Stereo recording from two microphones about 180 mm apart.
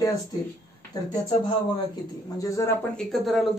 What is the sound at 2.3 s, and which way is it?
Speech, 15° left (ahead or behind).